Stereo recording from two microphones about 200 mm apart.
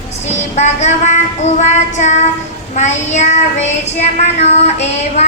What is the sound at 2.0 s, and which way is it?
Child singing, 35° left (ahead or behind).